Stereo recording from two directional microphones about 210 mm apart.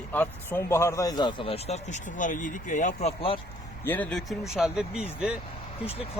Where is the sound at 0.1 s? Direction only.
10° left (ahead or behind); by 3.3 s 30° left (ahead or behind).